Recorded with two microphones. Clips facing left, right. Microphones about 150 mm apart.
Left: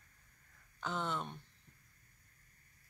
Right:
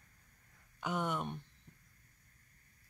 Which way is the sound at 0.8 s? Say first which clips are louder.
Right 2 dB; 15° right (ahead or behind).